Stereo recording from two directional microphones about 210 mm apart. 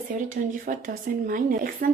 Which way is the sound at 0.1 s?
40° right (ahead or behind).